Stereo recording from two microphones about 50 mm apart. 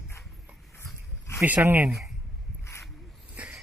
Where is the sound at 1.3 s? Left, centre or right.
Left.